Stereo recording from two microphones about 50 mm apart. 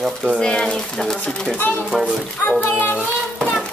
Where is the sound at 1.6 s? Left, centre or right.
Left.